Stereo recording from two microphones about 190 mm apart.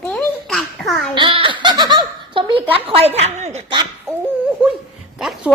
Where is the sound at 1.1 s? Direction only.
25° right (ahead or behind).